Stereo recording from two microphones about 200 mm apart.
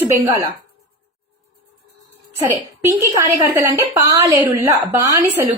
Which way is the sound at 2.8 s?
15° right (ahead or behind).